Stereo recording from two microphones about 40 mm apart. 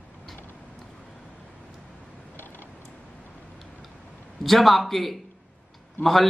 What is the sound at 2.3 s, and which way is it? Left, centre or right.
Creak, left.